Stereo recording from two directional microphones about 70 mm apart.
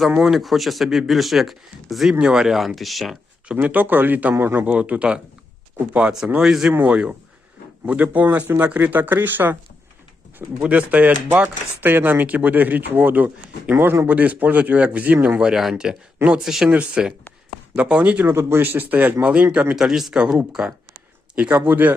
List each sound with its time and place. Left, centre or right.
0.1 s speech: centre
3.5 s speech: right
10.6 s speech: centre; by 14.1 s right
14.1 s speech: right
15.4 s speech: centre
16.1 s speech: right
16.4 s speech: centre
16.6 s speech: centre
18.3 s speech: right
19.7 s speech: centre; by 21.9 s right